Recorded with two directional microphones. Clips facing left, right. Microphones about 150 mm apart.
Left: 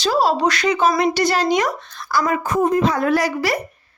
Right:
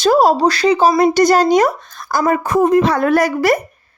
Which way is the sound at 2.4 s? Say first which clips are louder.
Right 6 dB; 75° right (ahead or behind).